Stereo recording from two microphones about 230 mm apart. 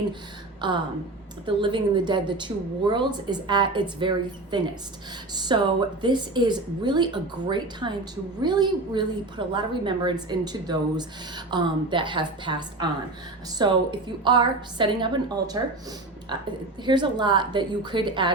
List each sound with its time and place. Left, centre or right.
0.6 s speech: centre
16.8 s speech: centre